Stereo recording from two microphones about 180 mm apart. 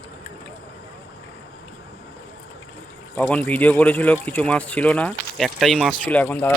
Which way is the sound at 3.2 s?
10° left (ahead or behind).